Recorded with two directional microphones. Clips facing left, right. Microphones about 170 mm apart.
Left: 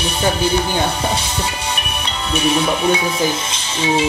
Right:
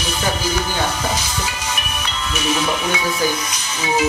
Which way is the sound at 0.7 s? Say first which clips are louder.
Left 3 dB; 30° left (ahead or behind).